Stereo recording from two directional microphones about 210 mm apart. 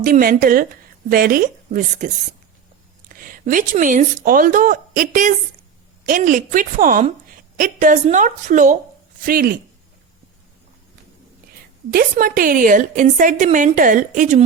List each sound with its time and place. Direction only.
0.0 s speech: 40° right (ahead or behind)
3.1 s a woman's voice: 40° right (ahead or behind)
11.9 s a woman's voice: 45° right (ahead or behind)